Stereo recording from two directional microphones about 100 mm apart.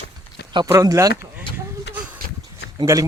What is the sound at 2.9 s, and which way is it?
Speech, 25° right (ahead or behind).